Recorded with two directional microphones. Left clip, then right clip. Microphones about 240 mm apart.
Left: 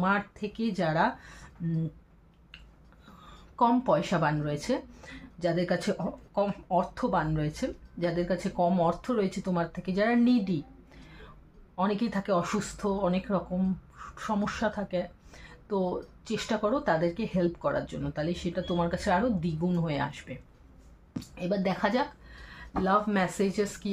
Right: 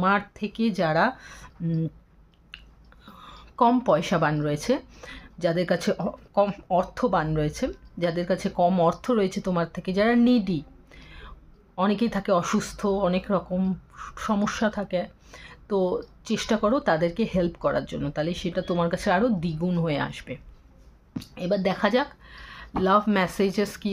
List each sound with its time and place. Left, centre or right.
0.0 s speech: right
3.2 s speech: right
21.4 s speech: right